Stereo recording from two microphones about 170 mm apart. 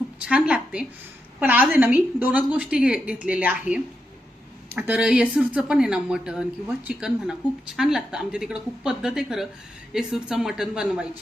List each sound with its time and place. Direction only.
0.3 s a woman's voice: 5° right (ahead or behind)